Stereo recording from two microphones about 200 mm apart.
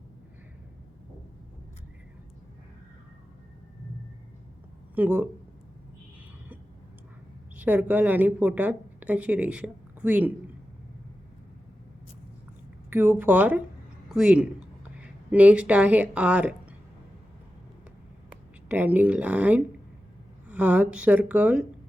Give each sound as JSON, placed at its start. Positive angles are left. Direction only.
{"t": 4.9, "sound": "speech", "side_deg": -10}
{"t": 7.5, "sound": "a woman's voice", "side_deg": -10}
{"t": 12.9, "sound": "speech", "side_deg": -10}
{"t": 18.7, "sound": "speech", "side_deg": -10}